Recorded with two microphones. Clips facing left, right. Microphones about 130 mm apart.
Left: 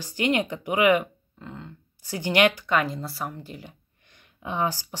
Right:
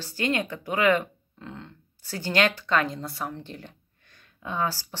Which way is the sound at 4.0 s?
20° left (ahead or behind).